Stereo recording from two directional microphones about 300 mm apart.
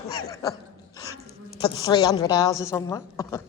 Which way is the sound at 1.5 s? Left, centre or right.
Centre.